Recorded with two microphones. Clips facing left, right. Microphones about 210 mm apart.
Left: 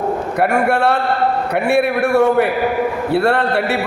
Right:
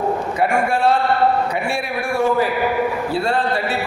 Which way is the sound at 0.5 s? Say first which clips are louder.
Left 2 dB; 65° left (ahead or behind).